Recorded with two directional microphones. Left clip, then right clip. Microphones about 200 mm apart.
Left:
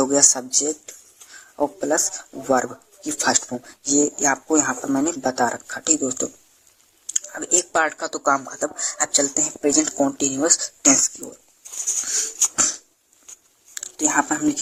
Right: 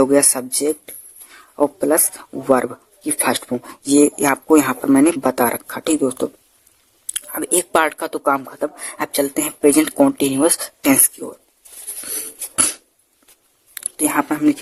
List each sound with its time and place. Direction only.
0.0 s speech: 45° right (ahead or behind)
13.7 s speech: 50° right (ahead or behind)